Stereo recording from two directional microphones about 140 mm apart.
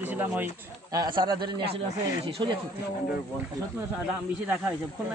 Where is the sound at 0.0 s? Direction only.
15° right (ahead or behind).